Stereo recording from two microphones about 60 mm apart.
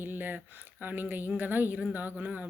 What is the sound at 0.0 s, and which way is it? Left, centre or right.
Speech, right.